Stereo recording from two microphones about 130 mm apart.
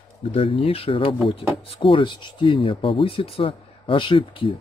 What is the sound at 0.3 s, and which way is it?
Speech, 45° left (ahead or behind).